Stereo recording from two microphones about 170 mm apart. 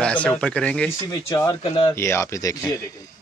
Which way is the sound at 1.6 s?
30° left (ahead or behind).